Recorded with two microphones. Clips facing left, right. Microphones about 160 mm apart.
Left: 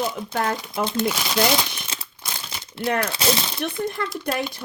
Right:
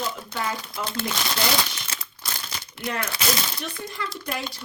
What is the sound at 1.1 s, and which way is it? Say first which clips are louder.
Speech: left 3 dB; 10° left (ahead or behind).